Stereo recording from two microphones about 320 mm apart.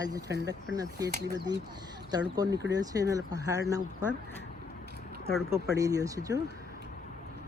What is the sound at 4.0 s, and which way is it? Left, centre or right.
Speech, centre.